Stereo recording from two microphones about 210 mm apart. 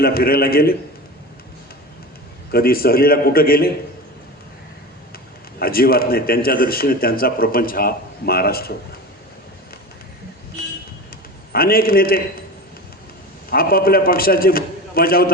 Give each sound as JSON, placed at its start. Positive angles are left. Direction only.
{"t": 0.0, "sound": "a man's voice", "side_deg": 45}
{"t": 2.5, "sound": "a man's voice", "side_deg": 45}
{"t": 5.5, "sound": "a man's voice", "side_deg": 45}
{"t": 11.5, "sound": "a man's voice", "side_deg": 45}
{"t": 13.5, "sound": "a man's voice", "side_deg": 45}